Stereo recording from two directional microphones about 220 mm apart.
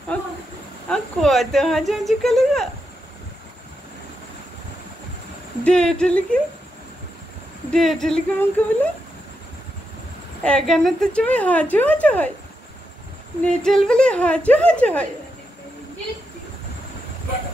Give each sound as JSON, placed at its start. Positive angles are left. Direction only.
{"t": 0.1, "sound": "a sound", "side_deg": 5}
{"t": 0.8, "sound": "speech", "side_deg": 5}
{"t": 5.6, "sound": "speech", "side_deg": 5}
{"t": 7.7, "sound": "speech", "side_deg": 0}
{"t": 10.4, "sound": "a woman's voice", "side_deg": 5}
{"t": 13.4, "sound": "speech", "side_deg": 5}